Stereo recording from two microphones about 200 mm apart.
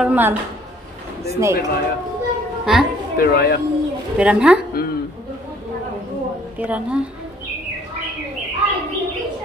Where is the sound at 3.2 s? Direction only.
50° left (ahead or behind).